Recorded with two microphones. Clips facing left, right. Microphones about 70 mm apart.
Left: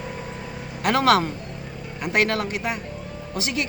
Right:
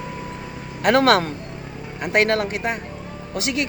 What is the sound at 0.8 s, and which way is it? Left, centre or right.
Speech, right.